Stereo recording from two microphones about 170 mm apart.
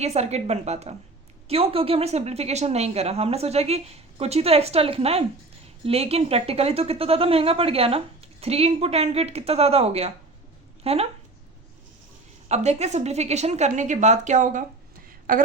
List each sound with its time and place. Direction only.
0.0 s speech: 40° right (ahead or behind)
12.5 s speech: 40° right (ahead or behind)
15.0 s a sound: 55° right (ahead or behind)